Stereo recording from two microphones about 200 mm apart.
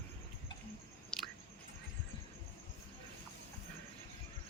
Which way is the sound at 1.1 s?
5° left (ahead or behind).